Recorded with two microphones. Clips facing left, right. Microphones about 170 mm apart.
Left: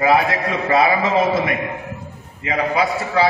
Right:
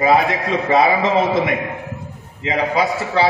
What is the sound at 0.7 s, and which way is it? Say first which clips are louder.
Speech: right 1 dB; 20° right (ahead or behind).